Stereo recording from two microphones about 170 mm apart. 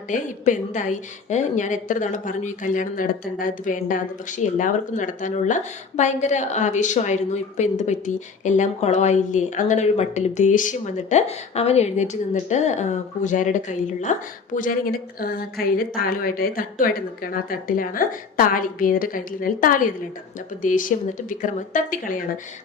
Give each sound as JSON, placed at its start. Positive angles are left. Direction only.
{"t": 0.1, "sound": "a woman's voice", "side_deg": 50}